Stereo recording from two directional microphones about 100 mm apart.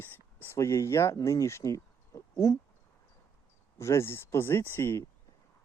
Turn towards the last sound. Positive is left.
turn(degrees=25)  # may be behind; listen again after turning